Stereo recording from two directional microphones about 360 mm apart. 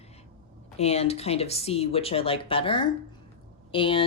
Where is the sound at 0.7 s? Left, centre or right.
Centre.